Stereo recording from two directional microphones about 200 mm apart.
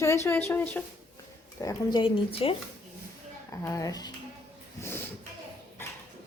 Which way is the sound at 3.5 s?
15° left (ahead or behind).